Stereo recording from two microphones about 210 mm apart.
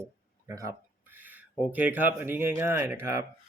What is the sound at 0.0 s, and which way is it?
Speech, 15° right (ahead or behind).